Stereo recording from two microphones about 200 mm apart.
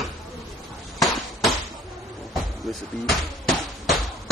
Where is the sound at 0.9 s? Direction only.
Centre (ahead or behind).